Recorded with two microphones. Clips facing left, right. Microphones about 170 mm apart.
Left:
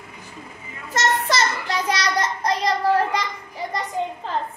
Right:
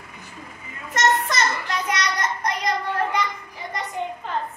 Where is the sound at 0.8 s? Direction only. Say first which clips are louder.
Right 1 dB; 30° left (ahead or behind).